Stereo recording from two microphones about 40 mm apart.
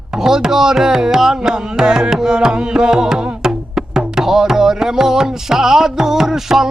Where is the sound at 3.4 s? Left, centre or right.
Centre.